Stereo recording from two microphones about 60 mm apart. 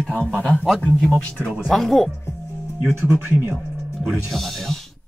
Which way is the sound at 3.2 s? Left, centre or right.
Right.